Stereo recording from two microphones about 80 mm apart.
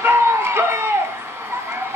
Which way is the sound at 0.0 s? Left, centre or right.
Right.